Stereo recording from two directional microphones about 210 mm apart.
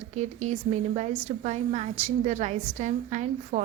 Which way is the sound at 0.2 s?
35° right (ahead or behind).